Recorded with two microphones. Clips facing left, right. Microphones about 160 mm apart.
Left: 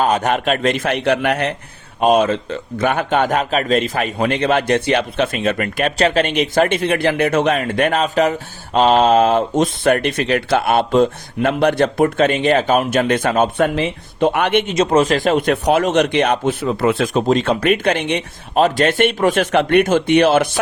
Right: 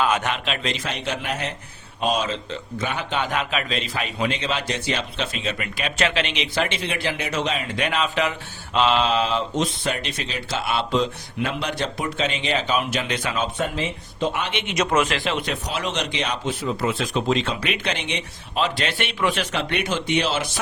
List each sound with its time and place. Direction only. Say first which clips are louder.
0.0 s a man's voice: left 6 dB; 40° left (ahead or behind)
6.0 s a man's voice: left 8 dB; 40° left (ahead or behind); by 14.6 s 60° left (ahead or behind)
14.7 s a man's voice: left 3 dB; 30° left (ahead or behind); by 17.2 s 55° left (ahead or behind)
17.2 s a man's voice: left 10 dB; 40° left (ahead or behind)